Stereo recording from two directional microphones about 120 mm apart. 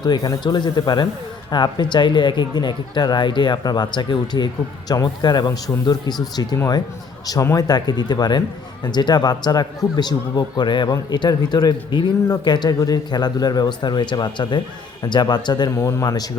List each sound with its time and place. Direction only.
0.0 s speech: 30° left (ahead or behind)
15.7 s speech: 25° left (ahead or behind)